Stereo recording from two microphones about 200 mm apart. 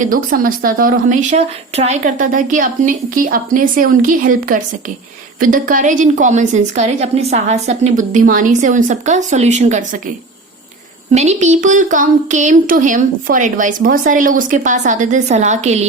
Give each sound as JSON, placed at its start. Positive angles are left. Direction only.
{"t": 0.0, "sound": "speech", "side_deg": -45}
{"t": 11.1, "sound": "speech", "side_deg": -35}